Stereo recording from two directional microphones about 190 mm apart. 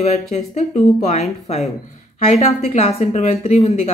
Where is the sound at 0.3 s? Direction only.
35° left (ahead or behind).